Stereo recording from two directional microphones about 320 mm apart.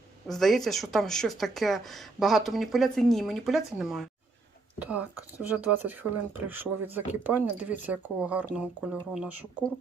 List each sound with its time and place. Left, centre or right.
0.3 s speech: centre